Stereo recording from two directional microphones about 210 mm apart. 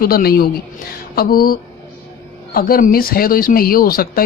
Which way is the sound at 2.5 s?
45° left (ahead or behind).